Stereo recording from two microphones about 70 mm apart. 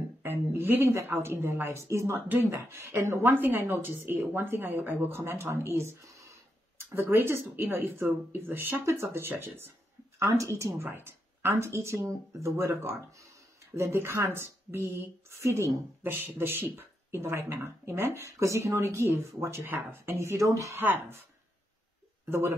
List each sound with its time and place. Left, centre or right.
0.2 s a woman's voice: right
2.1 s speech: right
2.5 s speech: right
10.1 s speech: right
10.8 s speech: right
16.0 s speech: right
20.7 s speech: right
22.3 s speech: right